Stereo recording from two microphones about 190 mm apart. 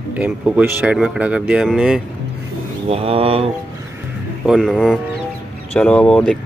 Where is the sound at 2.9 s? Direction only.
30° right (ahead or behind).